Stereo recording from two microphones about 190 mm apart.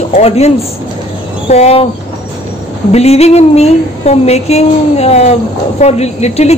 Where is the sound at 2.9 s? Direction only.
35° left (ahead or behind).